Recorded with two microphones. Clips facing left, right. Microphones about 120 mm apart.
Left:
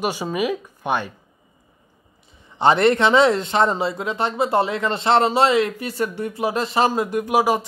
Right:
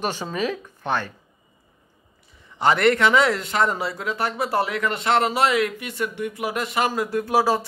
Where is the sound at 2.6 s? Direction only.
25° left (ahead or behind).